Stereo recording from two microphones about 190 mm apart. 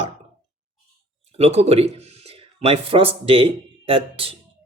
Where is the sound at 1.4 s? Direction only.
35° right (ahead or behind).